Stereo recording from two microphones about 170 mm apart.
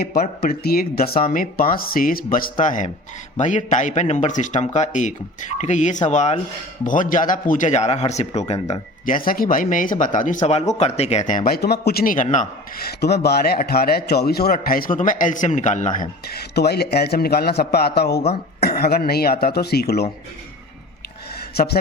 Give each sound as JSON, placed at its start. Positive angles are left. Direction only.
{"t": 0.0, "sound": "speech", "side_deg": 65}
{"t": 16.3, "sound": "a man's voice", "side_deg": 70}
{"t": 21.5, "sound": "speech", "side_deg": 70}